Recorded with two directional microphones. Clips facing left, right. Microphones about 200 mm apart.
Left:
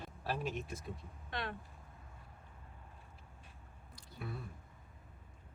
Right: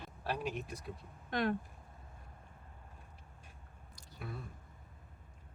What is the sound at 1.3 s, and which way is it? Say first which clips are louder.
Speech: right 9 dB; 45° right (ahead or behind).